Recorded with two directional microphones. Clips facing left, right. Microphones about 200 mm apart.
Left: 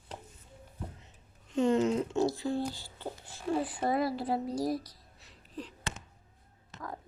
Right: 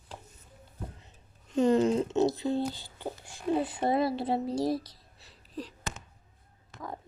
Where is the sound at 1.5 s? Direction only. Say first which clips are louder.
Right 3 dB; 35° right (ahead or behind).